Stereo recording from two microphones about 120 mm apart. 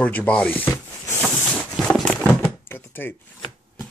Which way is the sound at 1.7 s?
5° left (ahead or behind).